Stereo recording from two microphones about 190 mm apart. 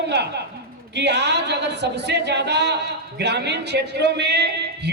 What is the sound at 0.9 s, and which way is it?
A man's voice, 65° right (ahead or behind).